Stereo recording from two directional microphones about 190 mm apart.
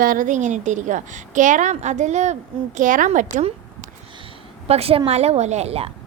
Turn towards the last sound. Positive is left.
turn(degrees=-35)  # may be behind; listen again after turning